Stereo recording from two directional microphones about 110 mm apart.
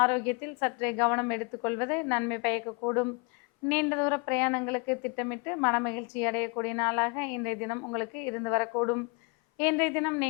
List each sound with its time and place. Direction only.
0.0 s a woman's voice: 15° left (ahead or behind)